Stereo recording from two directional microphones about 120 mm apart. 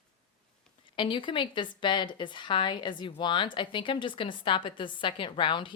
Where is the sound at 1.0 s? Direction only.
40° left (ahead or behind).